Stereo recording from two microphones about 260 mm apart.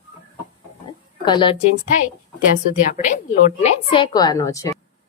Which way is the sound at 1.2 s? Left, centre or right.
Centre.